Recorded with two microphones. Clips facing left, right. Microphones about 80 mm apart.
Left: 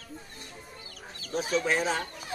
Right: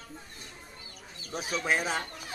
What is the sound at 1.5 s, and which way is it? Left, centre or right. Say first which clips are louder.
Speech: left 2 dB; centre.